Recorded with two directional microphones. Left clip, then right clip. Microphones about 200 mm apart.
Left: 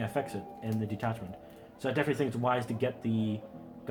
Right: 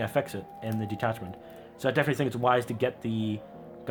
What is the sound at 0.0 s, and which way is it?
Speech, 45° right (ahead or behind).